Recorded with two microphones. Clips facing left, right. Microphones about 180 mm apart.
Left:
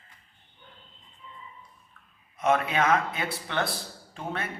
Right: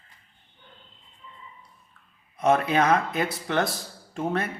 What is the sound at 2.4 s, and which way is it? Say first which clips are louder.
Speech: right 3 dB; 35° right (ahead or behind).